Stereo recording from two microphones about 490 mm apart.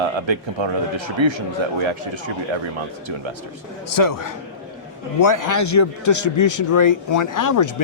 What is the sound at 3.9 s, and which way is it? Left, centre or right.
A man's voice, left.